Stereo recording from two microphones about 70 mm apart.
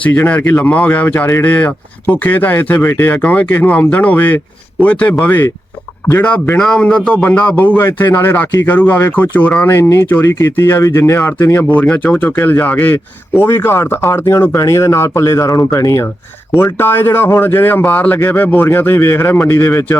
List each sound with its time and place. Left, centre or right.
0.3 s speech: left
6.6 s a man's voice: centre
7.2 s speech: left
9.7 s speech: left
11.7 s speech: left
13.3 s speech: left
16.5 s speech: left